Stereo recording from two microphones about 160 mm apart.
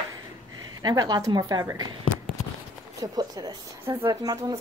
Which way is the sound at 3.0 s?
25° right (ahead or behind).